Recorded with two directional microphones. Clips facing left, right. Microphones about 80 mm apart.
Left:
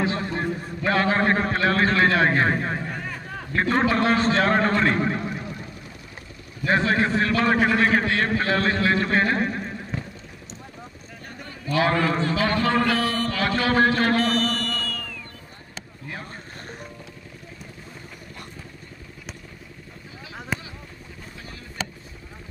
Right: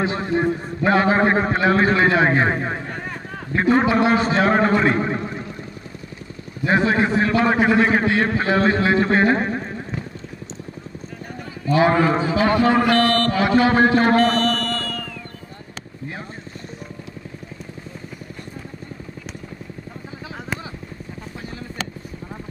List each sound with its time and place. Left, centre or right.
0.0 s a man's voice: right
6.6 s a man's voice: centre
11.7 s a man's voice: centre
12.9 s mantra: centre
13.3 s speech: right
14.1 s music: centre
20.5 s vehicle: centre